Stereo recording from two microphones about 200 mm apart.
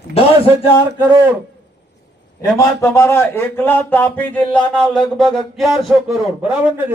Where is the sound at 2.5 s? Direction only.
15° left (ahead or behind); by 6.4 s centre (ahead or behind).